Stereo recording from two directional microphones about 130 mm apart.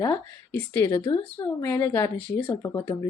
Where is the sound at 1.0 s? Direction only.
40° left (ahead or behind).